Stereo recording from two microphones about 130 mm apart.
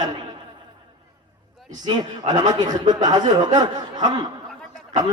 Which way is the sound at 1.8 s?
30° right (ahead or behind).